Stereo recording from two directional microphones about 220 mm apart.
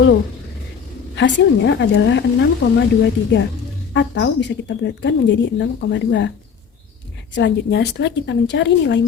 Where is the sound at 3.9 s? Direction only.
55° left (ahead or behind).